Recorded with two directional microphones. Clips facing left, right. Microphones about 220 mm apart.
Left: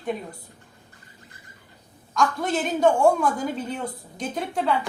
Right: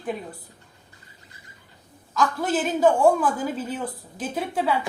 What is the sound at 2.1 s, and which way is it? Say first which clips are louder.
A woman's voice: even; centre (ahead or behind).